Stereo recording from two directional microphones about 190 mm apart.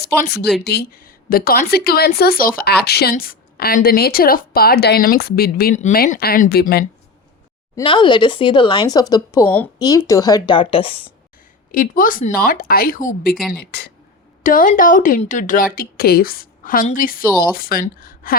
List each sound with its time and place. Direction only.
0.0 s speech: 60° left (ahead or behind)
7.8 s speech: 25° left (ahead or behind)
11.7 s speech: 45° left (ahead or behind)
13.7 s speech: 60° left (ahead or behind)
14.4 s speech: 45° left (ahead or behind)